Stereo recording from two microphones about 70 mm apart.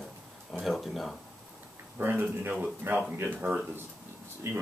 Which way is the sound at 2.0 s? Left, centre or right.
Right.